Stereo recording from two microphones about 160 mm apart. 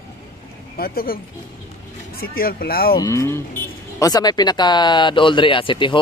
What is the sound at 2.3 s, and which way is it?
Speech, 70° left (ahead or behind).